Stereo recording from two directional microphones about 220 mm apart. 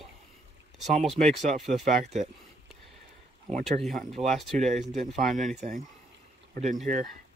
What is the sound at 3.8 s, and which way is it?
Speech, centre (ahead or behind).